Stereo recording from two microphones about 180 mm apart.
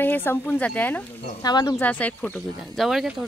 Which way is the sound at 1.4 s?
20° left (ahead or behind).